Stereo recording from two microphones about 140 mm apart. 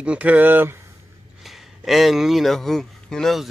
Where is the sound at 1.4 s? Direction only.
Centre (ahead or behind).